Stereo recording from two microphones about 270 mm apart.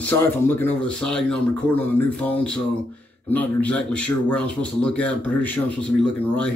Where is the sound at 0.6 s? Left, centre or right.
Centre.